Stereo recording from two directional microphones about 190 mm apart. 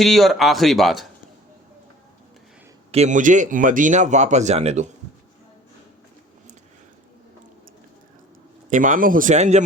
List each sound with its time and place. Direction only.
0.0 s speech: centre (ahead or behind)
2.9 s speech: 40° right (ahead or behind)
8.7 s speech: 45° right (ahead or behind)